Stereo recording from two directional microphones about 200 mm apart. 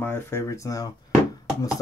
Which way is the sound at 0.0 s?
10° left (ahead or behind).